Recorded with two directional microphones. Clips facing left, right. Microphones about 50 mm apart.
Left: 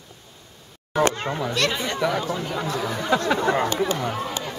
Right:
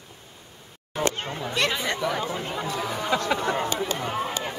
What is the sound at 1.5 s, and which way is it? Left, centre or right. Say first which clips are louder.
Speech: right 2 dB; centre.